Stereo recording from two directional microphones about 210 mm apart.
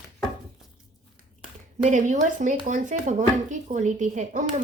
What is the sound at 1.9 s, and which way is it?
Speech, 35° right (ahead or behind).